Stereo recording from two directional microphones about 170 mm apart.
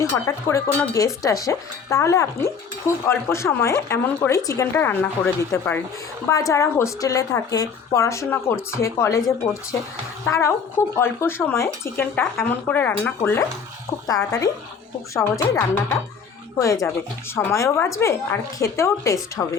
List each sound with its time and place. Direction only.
0.0 s speech: 15° left (ahead or behind)